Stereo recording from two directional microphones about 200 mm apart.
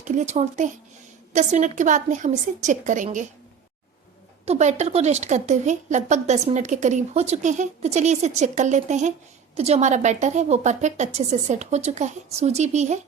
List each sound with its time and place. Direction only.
0.0 s a woman's voice: 35° right (ahead or behind)
4.4 s a woman's voice: 35° right (ahead or behind)